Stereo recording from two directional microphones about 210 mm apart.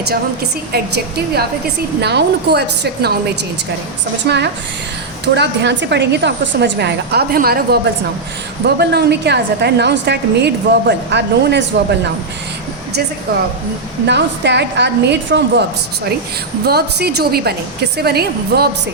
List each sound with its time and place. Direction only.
0.7 s a woman's voice: 50° right (ahead or behind)
4.3 s a woman's voice: 50° right (ahead or behind)
14.1 s a woman's voice: 55° right (ahead or behind)
16.6 s a woman's voice: 50° right (ahead or behind)